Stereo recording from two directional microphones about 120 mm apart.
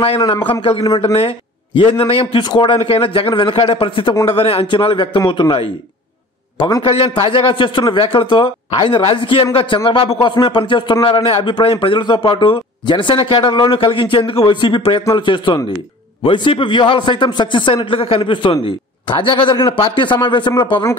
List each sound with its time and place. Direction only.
0.5 s a man's voice: 50° left (ahead or behind)
0.8 s a man's voice: 35° left (ahead or behind)
1.1 s a man's voice: 50° left (ahead or behind)